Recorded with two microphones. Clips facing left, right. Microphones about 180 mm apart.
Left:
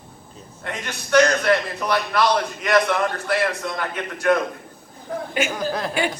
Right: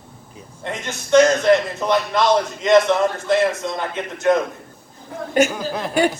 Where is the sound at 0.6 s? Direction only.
25° right (ahead or behind).